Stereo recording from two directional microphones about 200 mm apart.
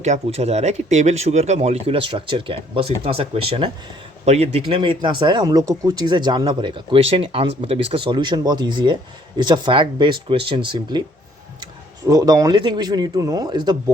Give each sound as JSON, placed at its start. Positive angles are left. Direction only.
{"t": 0.0, "sound": "speech", "side_deg": -35}
{"t": 12.0, "sound": "speech", "side_deg": -20}